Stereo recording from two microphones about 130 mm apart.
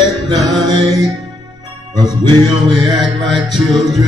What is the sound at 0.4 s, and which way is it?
Music, centre (ahead or behind).